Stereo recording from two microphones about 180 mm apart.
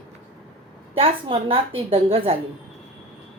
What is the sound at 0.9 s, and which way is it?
A woman's voice, 30° right (ahead or behind).